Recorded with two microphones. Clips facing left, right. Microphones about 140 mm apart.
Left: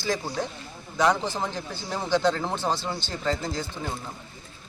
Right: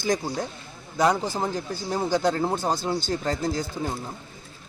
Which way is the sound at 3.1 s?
40° right (ahead or behind).